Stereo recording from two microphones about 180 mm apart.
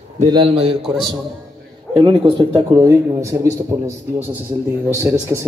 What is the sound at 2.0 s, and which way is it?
Speech, 25° right (ahead or behind).